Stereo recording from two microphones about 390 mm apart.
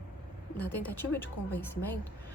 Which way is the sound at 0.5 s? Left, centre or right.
Centre.